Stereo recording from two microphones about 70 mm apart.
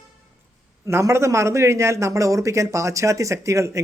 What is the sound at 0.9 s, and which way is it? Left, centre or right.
A man's voice, right.